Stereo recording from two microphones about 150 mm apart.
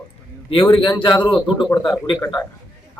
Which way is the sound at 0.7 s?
35° left (ahead or behind).